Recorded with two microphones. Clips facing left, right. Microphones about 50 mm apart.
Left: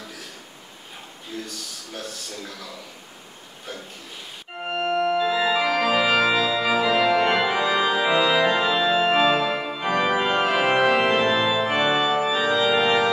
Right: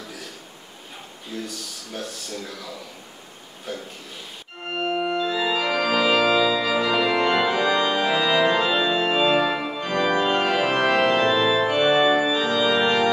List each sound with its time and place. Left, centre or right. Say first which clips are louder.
1.3 s speech: right 2 dB; centre
4.6 s organ: left 2 dB; centre
9.8 s organ: left 1 dB; centre
10.3 s music: left 1 dB; centre
10.8 s organ: right 2 dB; centre
12.3 s organ: even; centre